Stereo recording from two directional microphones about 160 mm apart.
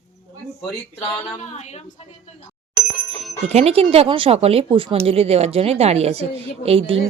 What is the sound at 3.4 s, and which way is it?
A woman's voice, 40° right (ahead or behind).